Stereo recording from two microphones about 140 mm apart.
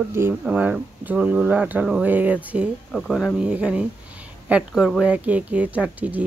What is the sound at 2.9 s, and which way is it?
Speech, centre (ahead or behind).